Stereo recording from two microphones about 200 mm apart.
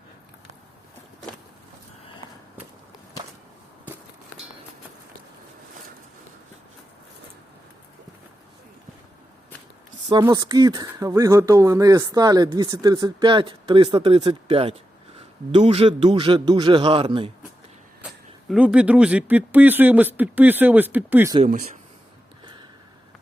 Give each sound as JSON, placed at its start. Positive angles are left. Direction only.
{"t": 10.1, "sound": "speech", "side_deg": -20}
{"t": 18.4, "sound": "speech", "side_deg": -5}